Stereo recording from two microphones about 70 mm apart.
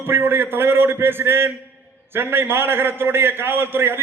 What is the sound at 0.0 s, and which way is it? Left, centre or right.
A man's voice, right.